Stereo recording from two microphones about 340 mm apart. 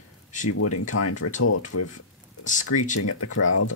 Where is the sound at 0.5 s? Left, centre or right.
Left.